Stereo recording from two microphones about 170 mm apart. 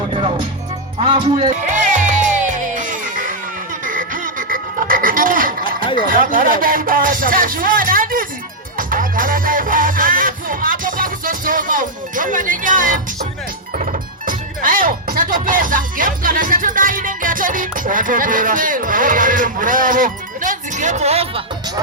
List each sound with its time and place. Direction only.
0.1 s music: 30° right (ahead or behind); by 5.7 s 55° right (ahead or behind)
6.1 s speech: 55° right (ahead or behind)
8.8 s music: 55° right (ahead or behind)
13.7 s speech: 50° right (ahead or behind)